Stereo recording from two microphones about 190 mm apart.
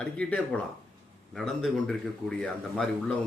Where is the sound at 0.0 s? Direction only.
5° left (ahead or behind).